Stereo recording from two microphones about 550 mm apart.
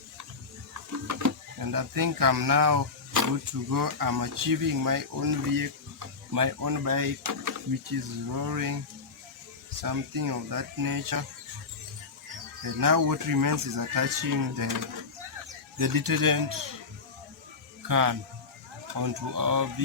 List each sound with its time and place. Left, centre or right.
1.0 s speech: right
9.8 s speech: right
12.6 s speech: right
17.8 s speech: right